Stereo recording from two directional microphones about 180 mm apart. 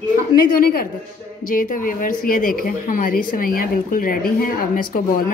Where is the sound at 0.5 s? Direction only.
55° left (ahead or behind).